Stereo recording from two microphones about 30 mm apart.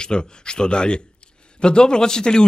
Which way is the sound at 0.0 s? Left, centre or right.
Left.